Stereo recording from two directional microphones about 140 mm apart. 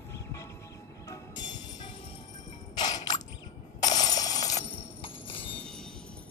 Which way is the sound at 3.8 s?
30° left (ahead or behind).